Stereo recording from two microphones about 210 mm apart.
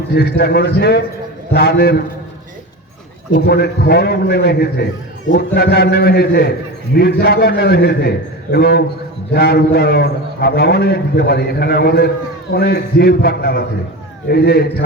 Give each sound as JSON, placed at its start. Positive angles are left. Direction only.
{"t": 0.1, "sound": "a man's voice", "side_deg": 50}
{"t": 3.3, "sound": "a man's voice", "side_deg": 50}